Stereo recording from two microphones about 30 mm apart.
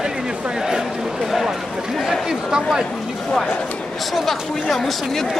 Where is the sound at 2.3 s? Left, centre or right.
Centre.